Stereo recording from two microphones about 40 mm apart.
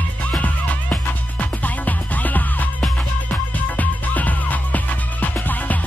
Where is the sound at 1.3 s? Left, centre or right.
Left.